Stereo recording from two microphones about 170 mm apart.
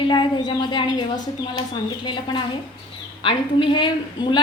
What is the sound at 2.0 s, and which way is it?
A woman's voice, 30° left (ahead or behind).